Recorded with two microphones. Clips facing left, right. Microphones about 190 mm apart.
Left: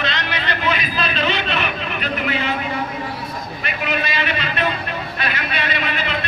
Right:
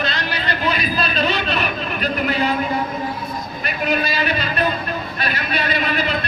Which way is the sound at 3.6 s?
40° right (ahead or behind).